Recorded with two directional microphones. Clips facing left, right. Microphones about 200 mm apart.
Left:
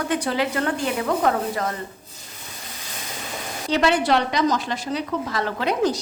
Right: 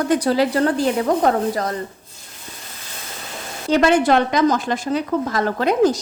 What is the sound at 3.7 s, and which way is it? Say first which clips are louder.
Speech: right 5 dB; 50° right (ahead or behind).